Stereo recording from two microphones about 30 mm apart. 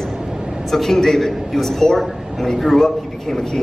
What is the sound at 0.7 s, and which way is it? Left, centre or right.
A man's voice, centre.